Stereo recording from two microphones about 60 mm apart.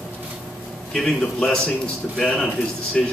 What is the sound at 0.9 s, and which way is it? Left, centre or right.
Speech, centre.